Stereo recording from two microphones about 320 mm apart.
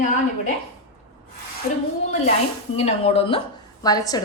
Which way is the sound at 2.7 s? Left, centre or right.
Centre.